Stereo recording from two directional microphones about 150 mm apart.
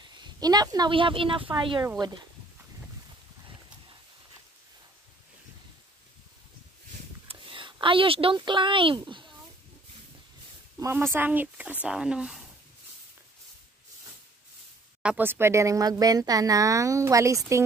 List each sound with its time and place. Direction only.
0.0 s speech: 30° right (ahead or behind)
7.2 s speech: 35° right (ahead or behind)
10.8 s speech: 15° right (ahead or behind)
15.0 s speech: 10° right (ahead or behind)